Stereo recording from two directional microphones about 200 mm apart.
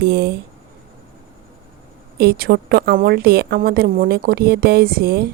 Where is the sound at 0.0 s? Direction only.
55° right (ahead or behind).